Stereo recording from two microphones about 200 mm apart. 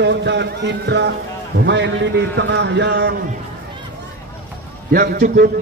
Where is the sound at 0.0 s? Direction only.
60° right (ahead or behind).